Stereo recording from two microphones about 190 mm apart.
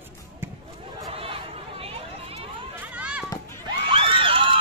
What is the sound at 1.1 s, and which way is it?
Chatter, 30° right (ahead or behind).